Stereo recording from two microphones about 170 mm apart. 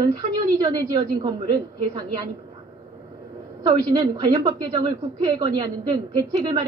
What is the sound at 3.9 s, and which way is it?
Speech, 25° right (ahead or behind).